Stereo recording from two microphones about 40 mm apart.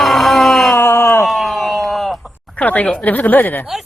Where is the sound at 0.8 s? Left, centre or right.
Left.